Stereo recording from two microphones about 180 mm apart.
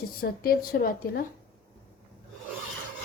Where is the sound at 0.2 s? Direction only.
55° left (ahead or behind).